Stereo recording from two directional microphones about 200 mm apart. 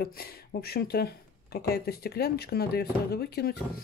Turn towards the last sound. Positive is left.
turn(degrees=50)  # may be behind; listen again after turning